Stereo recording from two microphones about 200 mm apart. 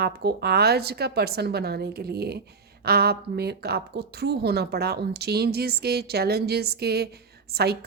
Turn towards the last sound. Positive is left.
turn(degrees=-50)  # may be behind; listen again after turning